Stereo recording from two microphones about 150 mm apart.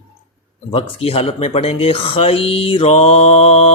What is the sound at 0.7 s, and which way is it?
Speech, 40° left (ahead or behind).